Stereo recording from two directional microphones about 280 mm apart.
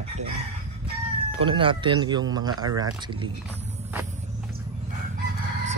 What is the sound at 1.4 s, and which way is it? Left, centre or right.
Speech, centre.